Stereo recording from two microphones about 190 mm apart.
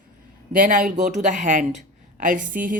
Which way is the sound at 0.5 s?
45° right (ahead or behind).